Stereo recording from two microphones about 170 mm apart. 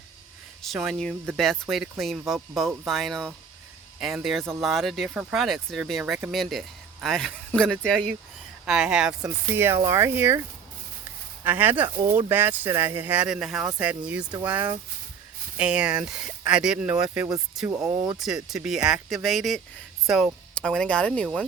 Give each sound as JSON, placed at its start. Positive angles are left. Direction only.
{"t": 0.6, "sound": "speech", "side_deg": 0}
{"t": 9.6, "sound": "speech", "side_deg": -15}
{"t": 11.4, "sound": "speech", "side_deg": -10}
{"t": 17.7, "sound": "speech", "side_deg": -20}
{"t": 18.1, "sound": "speech", "side_deg": -5}